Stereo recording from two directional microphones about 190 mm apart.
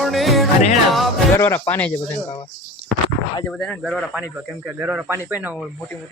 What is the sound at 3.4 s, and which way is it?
Speech, 5° left (ahead or behind).